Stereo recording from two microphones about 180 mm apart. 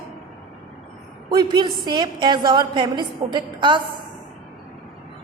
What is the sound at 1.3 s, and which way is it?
A woman's voice, 25° right (ahead or behind).